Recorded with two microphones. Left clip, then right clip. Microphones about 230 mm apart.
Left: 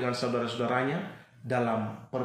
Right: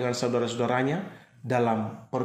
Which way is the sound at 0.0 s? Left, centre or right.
Right.